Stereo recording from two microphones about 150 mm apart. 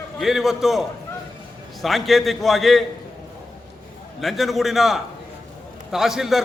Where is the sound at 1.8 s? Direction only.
Centre (ahead or behind).